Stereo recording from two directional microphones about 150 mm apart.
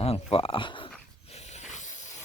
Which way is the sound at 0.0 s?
40° left (ahead or behind).